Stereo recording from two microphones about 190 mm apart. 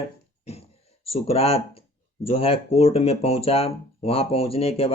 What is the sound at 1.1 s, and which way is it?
Speech, 30° left (ahead or behind).